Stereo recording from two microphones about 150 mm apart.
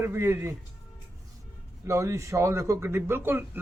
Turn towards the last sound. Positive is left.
turn(degrees=-15)  # may be behind; listen again after turning